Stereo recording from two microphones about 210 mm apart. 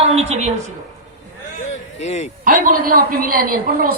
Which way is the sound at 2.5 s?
40° right (ahead or behind).